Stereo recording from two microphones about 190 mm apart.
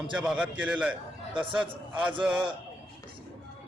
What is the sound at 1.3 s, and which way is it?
Speech, 25° right (ahead or behind).